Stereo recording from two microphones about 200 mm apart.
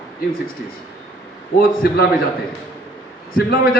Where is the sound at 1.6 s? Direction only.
45° left (ahead or behind).